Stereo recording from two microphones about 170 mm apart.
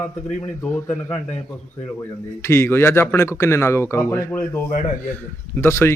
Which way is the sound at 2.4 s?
15° left (ahead or behind).